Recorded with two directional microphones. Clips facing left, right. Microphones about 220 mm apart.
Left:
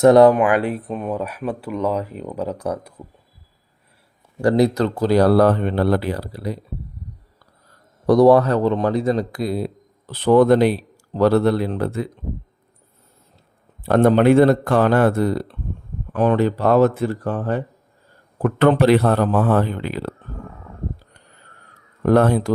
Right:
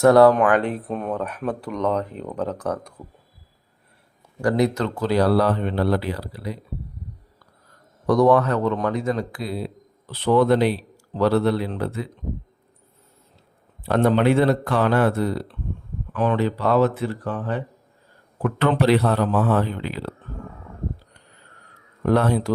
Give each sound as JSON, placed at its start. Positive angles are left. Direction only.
{"t": 0.0, "sound": "speech", "side_deg": 20}
{"t": 4.4, "sound": "a man's voice", "side_deg": 30}
{"t": 8.0, "sound": "a man's voice", "side_deg": 35}
{"t": 13.8, "sound": "a man's voice", "side_deg": 45}
{"t": 22.0, "sound": "a man's voice", "side_deg": 50}